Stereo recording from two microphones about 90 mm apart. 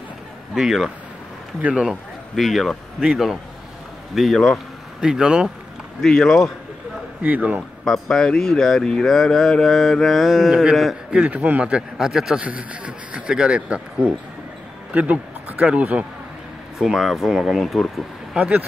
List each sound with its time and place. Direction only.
0.6 s speech: 5° right (ahead or behind)
1.9 s speech: centre (ahead or behind)
6.0 s speech: 5° left (ahead or behind)
7.2 s speech: 15° right (ahead or behind)
7.8 s speech: 5° left (ahead or behind)
18.3 s speech: 15° right (ahead or behind)